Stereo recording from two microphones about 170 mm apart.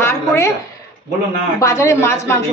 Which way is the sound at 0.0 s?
15° left (ahead or behind).